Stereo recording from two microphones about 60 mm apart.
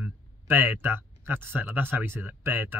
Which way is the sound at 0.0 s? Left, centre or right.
Right.